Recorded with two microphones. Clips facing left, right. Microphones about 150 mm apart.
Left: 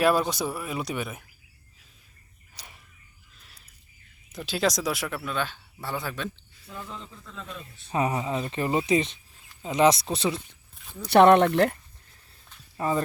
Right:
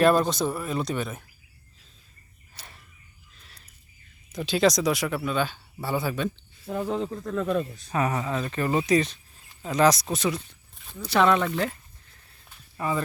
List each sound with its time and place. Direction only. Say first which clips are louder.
0.0 s speech: right 3 dB; 5° left (ahead or behind)
4.3 s speech: right 4 dB; 5° left (ahead or behind)
6.7 s speech: right 13 dB; 65° right (ahead or behind)
7.9 s speech: even; 20° left (ahead or behind)
11.1 s speech: left 5 dB; 60° left (ahead or behind)
12.8 s speech: left 2 dB; 30° left (ahead or behind)